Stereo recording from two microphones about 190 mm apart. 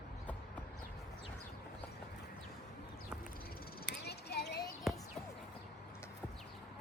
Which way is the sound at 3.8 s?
60° left (ahead or behind).